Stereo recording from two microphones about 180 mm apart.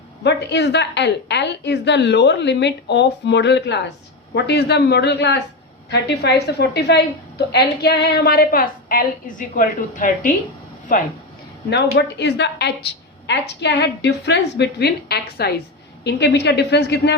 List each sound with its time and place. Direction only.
0.2 s a woman's voice: 70° left (ahead or behind); by 10.3 s 50° left (ahead or behind)
11.9 s a woman's voice: 70° left (ahead or behind)